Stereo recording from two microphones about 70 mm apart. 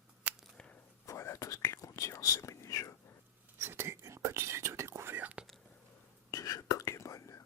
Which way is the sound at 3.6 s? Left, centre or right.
Right.